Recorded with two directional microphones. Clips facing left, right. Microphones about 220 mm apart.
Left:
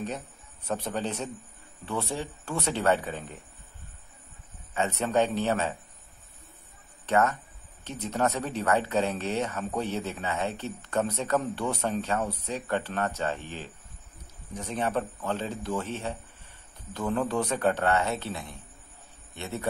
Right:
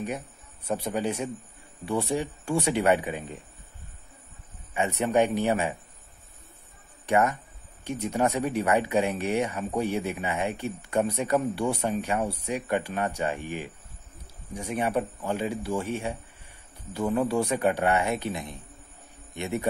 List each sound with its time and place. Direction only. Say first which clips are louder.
0.7 s a man's voice: right 3 dB; 10° right (ahead or behind)
4.7 s a man's voice: right 2 dB; 15° right (ahead or behind)
7.1 s a man's voice: right 1 dB; 15° right (ahead or behind)